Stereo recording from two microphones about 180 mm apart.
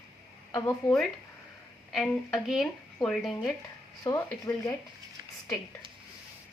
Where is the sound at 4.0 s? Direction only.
15° left (ahead or behind).